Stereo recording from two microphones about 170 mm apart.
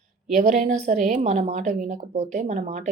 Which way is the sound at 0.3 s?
50° right (ahead or behind).